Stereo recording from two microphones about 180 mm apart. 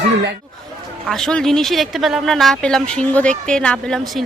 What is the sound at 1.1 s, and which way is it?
Speech, 5° left (ahead or behind).